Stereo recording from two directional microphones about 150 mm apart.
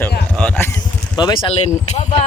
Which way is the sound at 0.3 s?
10° left (ahead or behind).